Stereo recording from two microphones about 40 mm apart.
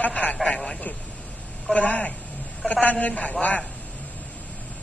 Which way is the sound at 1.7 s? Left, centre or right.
Left.